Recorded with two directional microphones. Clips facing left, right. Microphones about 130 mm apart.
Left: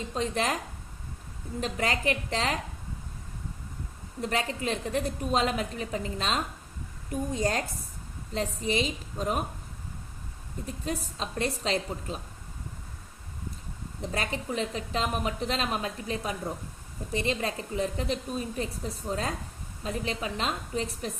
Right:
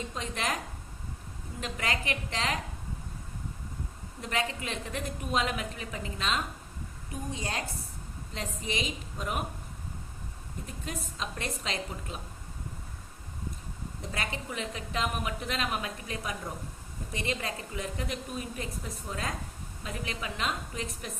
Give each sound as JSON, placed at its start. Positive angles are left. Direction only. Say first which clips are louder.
{"t": 0.1, "sound": "a woman's voice", "louder": "left 8 dB", "side_deg": 35}
{"t": 1.6, "sound": "a woman's voice", "louder": "left 5 dB", "side_deg": 35}
{"t": 4.2, "sound": "a woman's voice", "louder": "left 3 dB", "side_deg": 35}
{"t": 10.7, "sound": "a woman's voice", "louder": "left 7 dB", "side_deg": 35}
{"t": 14.0, "sound": "a woman's voice", "louder": "left 5 dB", "side_deg": 35}